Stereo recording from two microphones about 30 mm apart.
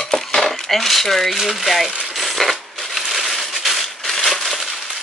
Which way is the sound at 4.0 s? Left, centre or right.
Centre.